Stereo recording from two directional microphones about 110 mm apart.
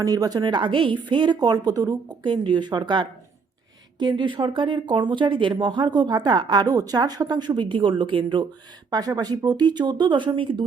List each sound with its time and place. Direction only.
0.0 s speech: 35° right (ahead or behind)